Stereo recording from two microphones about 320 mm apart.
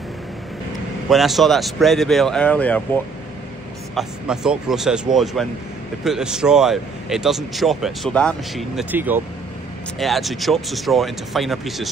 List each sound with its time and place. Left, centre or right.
1.0 s speech: centre